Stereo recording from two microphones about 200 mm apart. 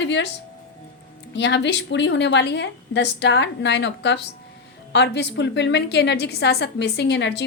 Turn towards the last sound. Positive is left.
turn(degrees=60)  # may be behind; listen again after turning